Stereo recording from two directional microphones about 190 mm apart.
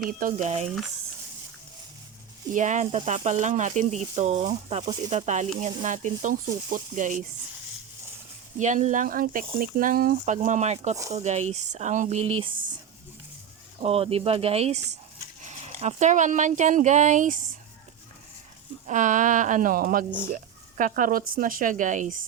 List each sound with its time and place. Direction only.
0.1 s speech: 45° right (ahead or behind)
2.5 s speech: 40° right (ahead or behind)
8.5 s speech: 40° right (ahead or behind)
13.8 s speech: 30° right (ahead or behind)
18.9 s speech: 40° right (ahead or behind)